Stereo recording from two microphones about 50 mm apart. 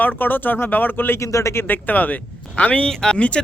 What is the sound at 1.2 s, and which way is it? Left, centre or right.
Speech, left.